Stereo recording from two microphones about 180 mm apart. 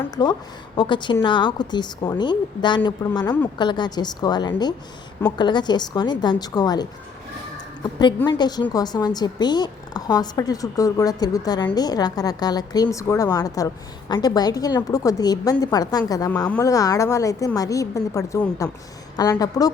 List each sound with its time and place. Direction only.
0.2 s a woman's voice: 25° left (ahead or behind)
8.3 s a woman's voice: 25° left (ahead or behind)